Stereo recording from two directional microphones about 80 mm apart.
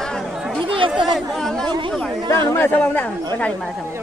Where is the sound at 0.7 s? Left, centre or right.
Right.